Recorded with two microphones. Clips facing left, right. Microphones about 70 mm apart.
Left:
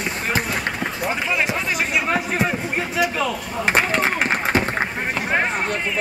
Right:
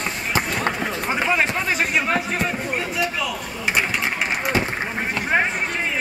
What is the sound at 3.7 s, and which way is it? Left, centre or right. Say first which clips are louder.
Run: left 3 dB; left.